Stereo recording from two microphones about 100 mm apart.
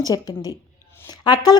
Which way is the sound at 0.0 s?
40° left (ahead or behind).